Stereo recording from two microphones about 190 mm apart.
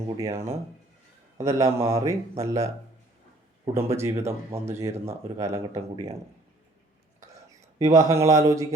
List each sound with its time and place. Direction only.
0.2 s speech: 15° right (ahead or behind)
3.8 s speech: 15° right (ahead or behind)
7.2 s a sound: 15° right (ahead or behind)